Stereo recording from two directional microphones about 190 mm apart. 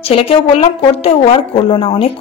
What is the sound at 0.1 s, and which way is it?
Speech, 30° left (ahead or behind).